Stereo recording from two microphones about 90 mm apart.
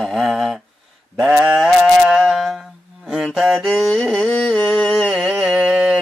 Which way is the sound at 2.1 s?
Centre (ahead or behind).